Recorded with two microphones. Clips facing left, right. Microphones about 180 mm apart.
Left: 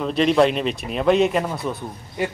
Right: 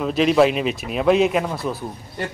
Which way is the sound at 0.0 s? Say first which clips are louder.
Right 1 dB; 5° right (ahead or behind).